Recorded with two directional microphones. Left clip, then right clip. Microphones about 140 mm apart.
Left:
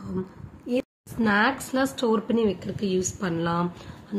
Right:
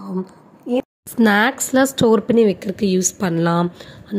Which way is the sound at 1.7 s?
45° right (ahead or behind).